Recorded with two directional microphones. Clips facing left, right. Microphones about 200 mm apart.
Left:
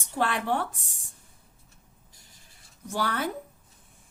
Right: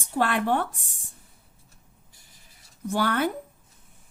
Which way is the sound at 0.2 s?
60° right (ahead or behind).